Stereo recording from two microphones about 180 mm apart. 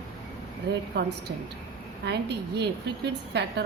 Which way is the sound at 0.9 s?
65° right (ahead or behind).